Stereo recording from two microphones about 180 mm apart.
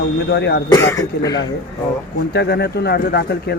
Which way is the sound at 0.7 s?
15° left (ahead or behind).